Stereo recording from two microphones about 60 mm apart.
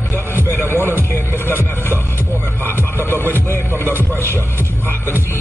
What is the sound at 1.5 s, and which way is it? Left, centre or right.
Music, left.